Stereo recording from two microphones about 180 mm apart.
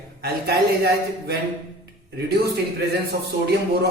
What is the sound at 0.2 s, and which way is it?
Speech, 60° right (ahead or behind).